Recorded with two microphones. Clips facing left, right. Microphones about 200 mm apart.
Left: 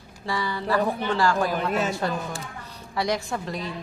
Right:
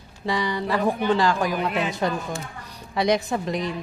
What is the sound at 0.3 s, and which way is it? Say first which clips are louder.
A woman's voice: right 2 dB; 20° right (ahead or behind).